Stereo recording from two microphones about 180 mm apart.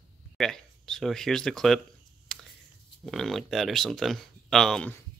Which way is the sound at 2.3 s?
5° left (ahead or behind).